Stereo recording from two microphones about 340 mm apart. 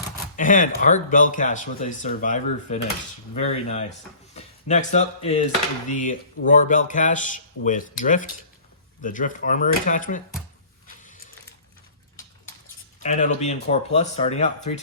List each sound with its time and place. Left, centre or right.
0.3 s speech: left
13.0 s speech: left